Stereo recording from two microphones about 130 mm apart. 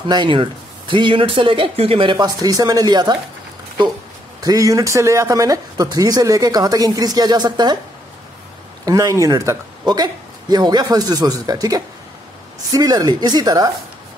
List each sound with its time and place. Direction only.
0.1 s speech: 40° right (ahead or behind)
4.4 s speech: 25° right (ahead or behind)
8.8 s speech: 25° right (ahead or behind)